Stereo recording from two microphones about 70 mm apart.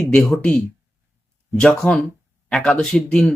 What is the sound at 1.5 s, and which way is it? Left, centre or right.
Speech, centre.